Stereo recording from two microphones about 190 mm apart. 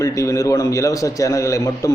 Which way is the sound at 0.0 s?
15° left (ahead or behind).